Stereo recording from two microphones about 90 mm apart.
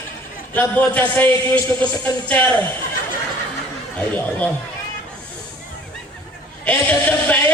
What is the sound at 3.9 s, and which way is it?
Speech, 15° left (ahead or behind).